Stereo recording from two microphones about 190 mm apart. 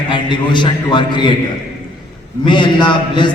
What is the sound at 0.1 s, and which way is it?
A man's voice, 25° left (ahead or behind).